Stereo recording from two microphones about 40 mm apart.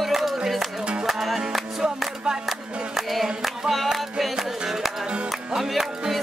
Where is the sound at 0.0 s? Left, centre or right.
Centre.